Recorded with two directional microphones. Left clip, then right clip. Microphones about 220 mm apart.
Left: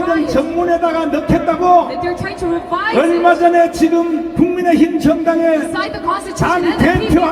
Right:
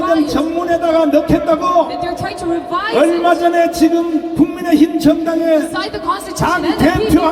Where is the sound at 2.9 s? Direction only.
25° right (ahead or behind).